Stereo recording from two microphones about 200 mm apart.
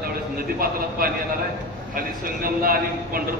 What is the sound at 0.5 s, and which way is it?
A man's voice, 45° right (ahead or behind).